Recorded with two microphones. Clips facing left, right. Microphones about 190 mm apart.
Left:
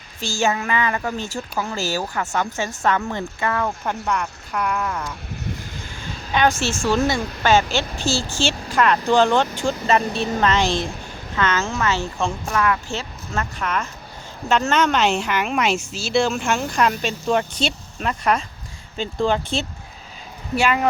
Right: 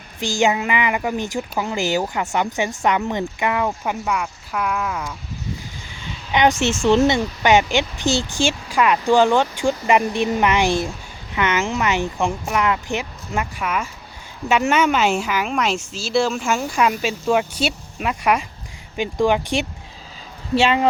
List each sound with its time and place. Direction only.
0.2 s a woman's voice: 15° right (ahead or behind)
6.3 s a woman's voice: 20° right (ahead or behind)
20.6 s speech: 25° right (ahead or behind)